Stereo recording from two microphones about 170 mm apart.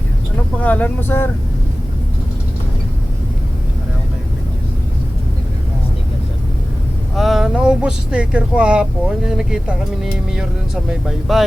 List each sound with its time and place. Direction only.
0.6 s speech: 10° left (ahead or behind)
7.2 s speech: centre (ahead or behind)